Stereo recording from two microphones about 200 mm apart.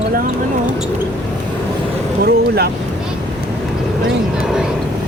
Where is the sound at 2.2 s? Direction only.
50° right (ahead or behind).